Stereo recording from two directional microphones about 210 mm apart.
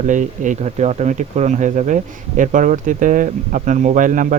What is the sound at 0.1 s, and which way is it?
Speech, 35° right (ahead or behind).